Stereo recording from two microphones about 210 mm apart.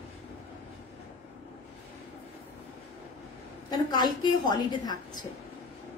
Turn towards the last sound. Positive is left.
turn(degrees=20)  # may be behind; listen again after turning